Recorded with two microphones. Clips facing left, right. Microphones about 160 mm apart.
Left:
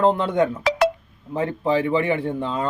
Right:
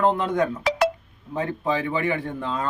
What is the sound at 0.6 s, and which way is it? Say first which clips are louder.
Telephone dialing: left 1 dB; 90° left.